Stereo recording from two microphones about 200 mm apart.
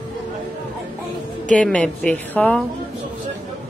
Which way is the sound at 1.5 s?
5° left (ahead or behind).